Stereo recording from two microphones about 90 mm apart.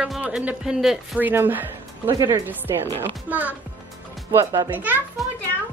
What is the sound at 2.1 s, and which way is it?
Speech, 45° right (ahead or behind).